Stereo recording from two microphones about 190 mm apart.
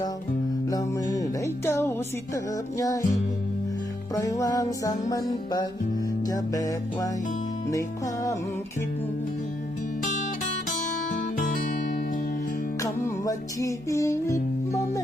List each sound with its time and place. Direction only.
0.7 s music: 20° left (ahead or behind)
4.1 s music: 15° left (ahead or behind)
11.1 s music: 45° left (ahead or behind)
12.8 s music: 15° left (ahead or behind)